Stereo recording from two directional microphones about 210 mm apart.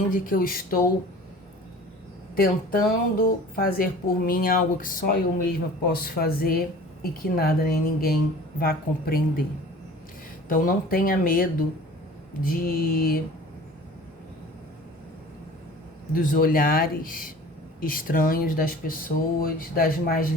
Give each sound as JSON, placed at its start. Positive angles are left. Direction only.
{"t": 0.1, "sound": "speech", "side_deg": 40}
{"t": 2.3, "sound": "speech", "side_deg": 40}
{"t": 10.5, "sound": "speech", "side_deg": 40}
{"t": 12.6, "sound": "speech", "side_deg": 45}
{"t": 16.1, "sound": "speech", "side_deg": 40}